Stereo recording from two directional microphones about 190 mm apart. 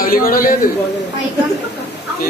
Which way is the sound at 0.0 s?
50° left (ahead or behind).